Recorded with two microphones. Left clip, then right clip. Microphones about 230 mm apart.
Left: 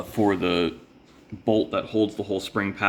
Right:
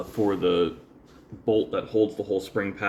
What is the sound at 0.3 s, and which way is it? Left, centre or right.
Speech, left.